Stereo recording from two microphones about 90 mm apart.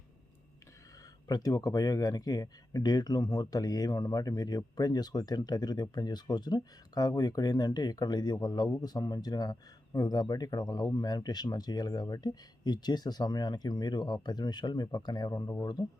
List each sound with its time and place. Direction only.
1.3 s speech: 45° left (ahead or behind)